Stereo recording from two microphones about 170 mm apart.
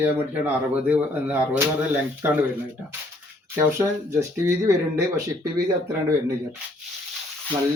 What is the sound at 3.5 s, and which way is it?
Speech, 15° right (ahead or behind).